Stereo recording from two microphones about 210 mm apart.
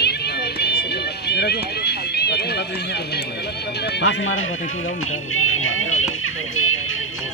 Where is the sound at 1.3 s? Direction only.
50° left (ahead or behind).